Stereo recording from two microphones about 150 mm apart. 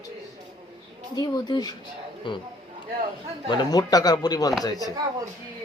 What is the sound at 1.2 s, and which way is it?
Speech, 30° left (ahead or behind).